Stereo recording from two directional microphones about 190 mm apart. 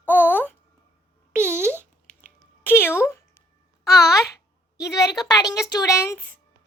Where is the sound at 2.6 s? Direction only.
10° left (ahead or behind).